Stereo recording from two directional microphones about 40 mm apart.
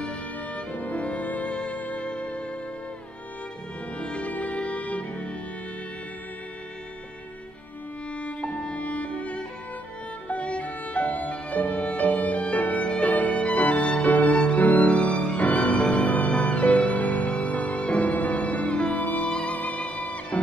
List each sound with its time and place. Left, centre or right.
0.7 s music: left
4.0 s music: left
8.4 s music: left